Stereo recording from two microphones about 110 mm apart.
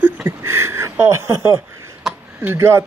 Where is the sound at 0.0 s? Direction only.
20° right (ahead or behind).